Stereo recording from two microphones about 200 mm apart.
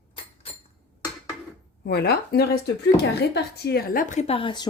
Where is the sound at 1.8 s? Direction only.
55° left (ahead or behind); by 4.6 s 25° left (ahead or behind).